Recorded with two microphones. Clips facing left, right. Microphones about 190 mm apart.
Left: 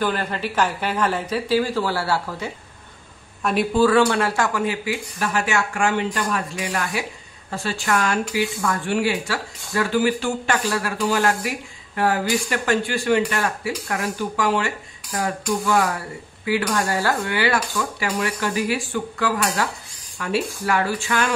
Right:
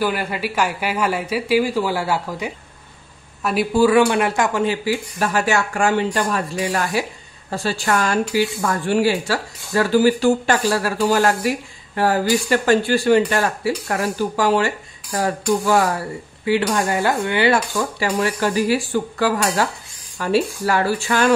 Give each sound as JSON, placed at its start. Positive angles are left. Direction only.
{"t": 0.0, "sound": "speech", "side_deg": -10}
{"t": 3.4, "sound": "speech", "side_deg": -5}
{"t": 3.8, "sound": "speech", "side_deg": -15}